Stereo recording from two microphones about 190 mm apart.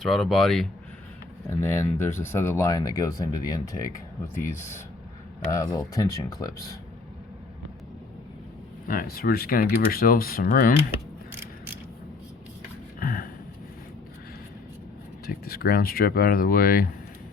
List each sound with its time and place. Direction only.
0.0 s speech: centre (ahead or behind)
1.5 s speech: 15° left (ahead or behind)
8.9 s speech: 50° left (ahead or behind)
13.0 s a sound: 50° left (ahead or behind)
15.3 s speech: 50° left (ahead or behind)